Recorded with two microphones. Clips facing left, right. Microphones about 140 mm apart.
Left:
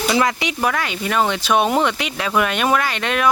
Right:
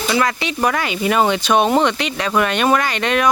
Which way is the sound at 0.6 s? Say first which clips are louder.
Right 4 dB; centre (ahead or behind).